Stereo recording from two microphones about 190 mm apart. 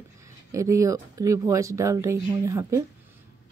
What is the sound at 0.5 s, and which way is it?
Speech, 15° right (ahead or behind).